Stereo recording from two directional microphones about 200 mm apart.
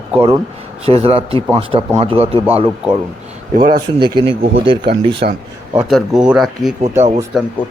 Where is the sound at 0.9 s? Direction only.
30° right (ahead or behind).